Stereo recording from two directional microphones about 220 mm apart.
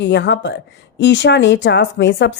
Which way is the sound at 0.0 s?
50° left (ahead or behind).